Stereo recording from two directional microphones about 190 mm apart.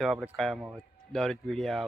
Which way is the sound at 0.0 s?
Centre (ahead or behind).